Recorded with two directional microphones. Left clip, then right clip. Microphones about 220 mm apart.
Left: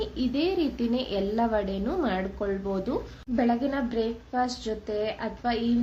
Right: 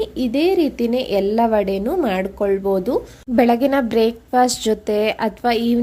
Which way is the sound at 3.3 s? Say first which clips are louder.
Right 11 dB; 50° right (ahead or behind).